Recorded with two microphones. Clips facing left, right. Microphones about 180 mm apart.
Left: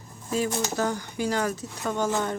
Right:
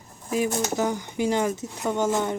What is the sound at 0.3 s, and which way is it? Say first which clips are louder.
Speech: right 2 dB; 15° right (ahead or behind).